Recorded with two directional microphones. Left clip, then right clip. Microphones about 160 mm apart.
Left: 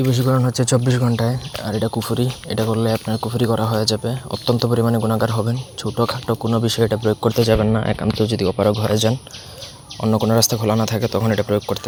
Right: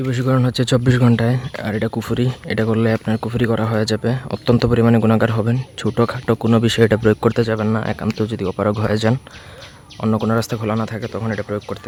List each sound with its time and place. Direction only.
0.0 s speech: 5° right (ahead or behind)
0.3 s speech: 30° right (ahead or behind)
0.6 s speech: 45° right (ahead or behind)
1.6 s speech: 15° right (ahead or behind)
4.8 s speech: 35° right (ahead or behind)
5.8 s speech: 35° right (ahead or behind)
7.4 s speech: centre (ahead or behind)
10.9 s speech: 15° left (ahead or behind)